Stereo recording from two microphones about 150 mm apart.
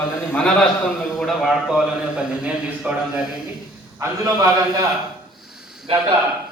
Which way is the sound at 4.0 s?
25° right (ahead or behind).